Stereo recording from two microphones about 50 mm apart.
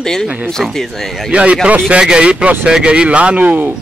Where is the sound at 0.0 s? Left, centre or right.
Centre.